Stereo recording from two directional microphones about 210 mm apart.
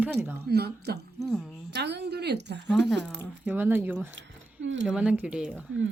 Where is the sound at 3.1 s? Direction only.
10° right (ahead or behind).